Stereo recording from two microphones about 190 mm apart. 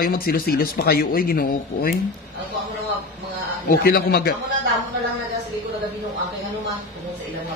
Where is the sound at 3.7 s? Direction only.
55° left (ahead or behind).